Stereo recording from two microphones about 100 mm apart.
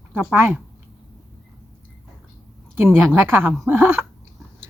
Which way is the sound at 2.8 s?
20° right (ahead or behind).